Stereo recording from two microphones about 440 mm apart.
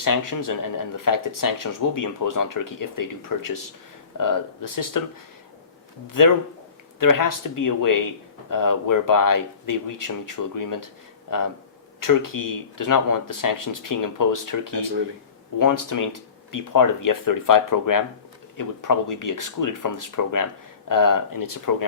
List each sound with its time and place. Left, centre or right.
0.0 s speech: left
6.1 s speech: left